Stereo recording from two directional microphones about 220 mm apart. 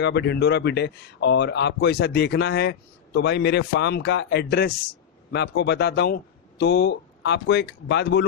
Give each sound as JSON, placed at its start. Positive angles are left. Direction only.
{"t": 0.0, "sound": "a man's voice", "side_deg": 50}